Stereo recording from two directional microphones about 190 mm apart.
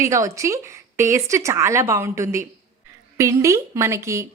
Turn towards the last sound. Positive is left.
turn(degrees=-15)  # may be behind; listen again after turning